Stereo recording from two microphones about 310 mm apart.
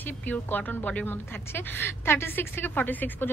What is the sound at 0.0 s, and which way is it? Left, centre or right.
Speech, centre.